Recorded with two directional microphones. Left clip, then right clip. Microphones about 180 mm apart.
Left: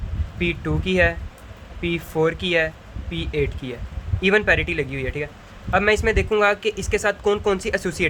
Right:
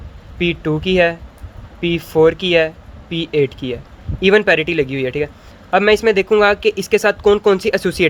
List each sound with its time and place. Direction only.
0.3 s speech: 30° right (ahead or behind)